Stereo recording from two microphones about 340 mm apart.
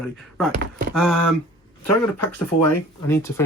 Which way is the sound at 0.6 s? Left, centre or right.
Right.